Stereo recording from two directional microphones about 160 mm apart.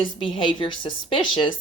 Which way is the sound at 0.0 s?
30° left (ahead or behind).